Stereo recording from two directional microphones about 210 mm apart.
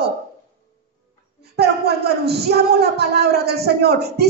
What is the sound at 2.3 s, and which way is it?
Speech, 50° right (ahead or behind).